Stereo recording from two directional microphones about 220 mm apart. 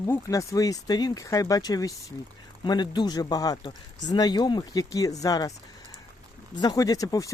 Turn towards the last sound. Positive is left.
turn(degrees=15)  # may be behind; listen again after turning